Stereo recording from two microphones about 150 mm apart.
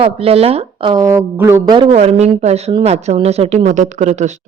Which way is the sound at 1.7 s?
30° right (ahead or behind).